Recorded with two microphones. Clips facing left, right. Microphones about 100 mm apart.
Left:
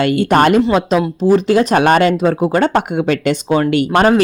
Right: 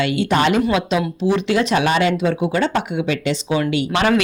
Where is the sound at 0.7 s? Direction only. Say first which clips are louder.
Left 5 dB; 40° left (ahead or behind).